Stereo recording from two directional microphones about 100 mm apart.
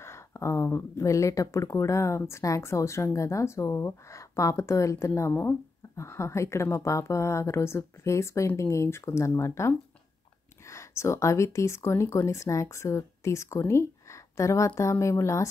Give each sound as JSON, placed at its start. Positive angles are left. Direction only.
{"t": 0.0, "sound": "a woman's voice", "side_deg": 25}